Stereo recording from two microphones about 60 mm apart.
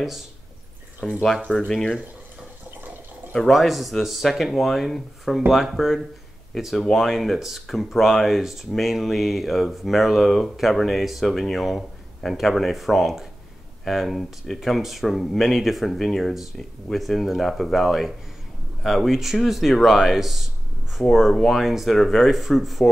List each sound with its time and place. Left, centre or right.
1.0 s speech: centre
3.3 s speech: centre